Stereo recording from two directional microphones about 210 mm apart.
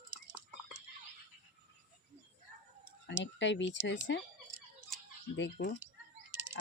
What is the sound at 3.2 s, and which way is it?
Speech, 60° left (ahead or behind).